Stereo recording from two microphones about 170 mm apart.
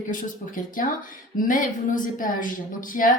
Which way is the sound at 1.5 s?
50° left (ahead or behind).